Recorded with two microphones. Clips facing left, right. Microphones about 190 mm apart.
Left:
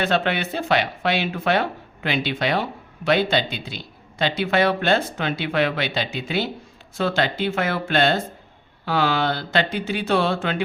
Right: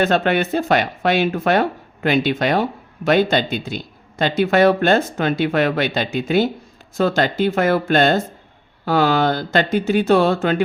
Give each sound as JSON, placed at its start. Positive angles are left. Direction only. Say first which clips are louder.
{"t": 0.0, "sound": "speech", "louder": "right 5 dB", "side_deg": -45}